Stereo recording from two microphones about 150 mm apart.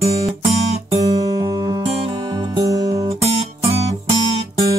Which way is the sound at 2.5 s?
25° right (ahead or behind).